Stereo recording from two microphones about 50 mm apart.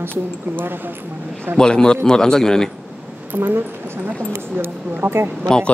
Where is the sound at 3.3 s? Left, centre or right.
Right.